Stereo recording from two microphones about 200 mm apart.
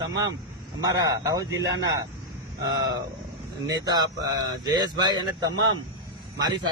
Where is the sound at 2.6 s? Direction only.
20° right (ahead or behind).